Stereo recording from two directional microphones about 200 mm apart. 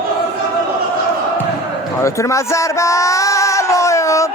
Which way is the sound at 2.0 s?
15° left (ahead or behind).